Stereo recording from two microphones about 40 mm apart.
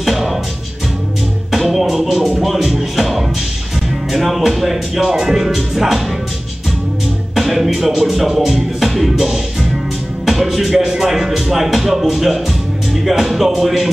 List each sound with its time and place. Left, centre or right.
0.0 s music: centre
1.5 s music: centre
4.1 s speech: centre
7.3 s music: centre
13.0 s speech: centre